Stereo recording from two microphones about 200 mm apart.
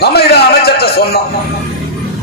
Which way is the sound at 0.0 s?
55° left (ahead or behind).